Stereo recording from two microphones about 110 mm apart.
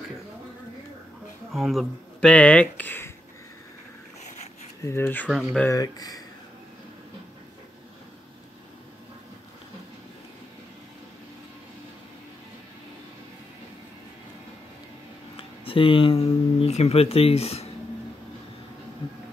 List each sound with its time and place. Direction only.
1.5 s speech: centre (ahead or behind)
2.1 s speech: 10° left (ahead or behind)
4.8 s speech: 25° left (ahead or behind)
5.3 s speech: 5° right (ahead or behind)
5.7 s speech: 35° left (ahead or behind)
15.3 s speech: 55° left (ahead or behind)